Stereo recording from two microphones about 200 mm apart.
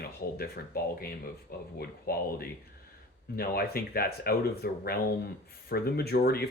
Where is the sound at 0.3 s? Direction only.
50° left (ahead or behind).